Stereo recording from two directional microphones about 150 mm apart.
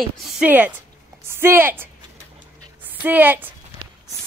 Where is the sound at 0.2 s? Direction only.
10° right (ahead or behind).